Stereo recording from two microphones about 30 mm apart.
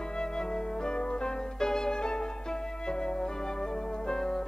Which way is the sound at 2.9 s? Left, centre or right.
Left.